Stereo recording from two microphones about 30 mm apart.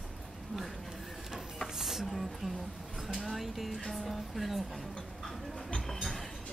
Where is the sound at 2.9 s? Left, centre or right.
Centre.